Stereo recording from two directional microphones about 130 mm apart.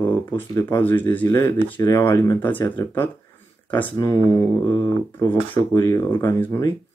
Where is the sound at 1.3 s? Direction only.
30° left (ahead or behind).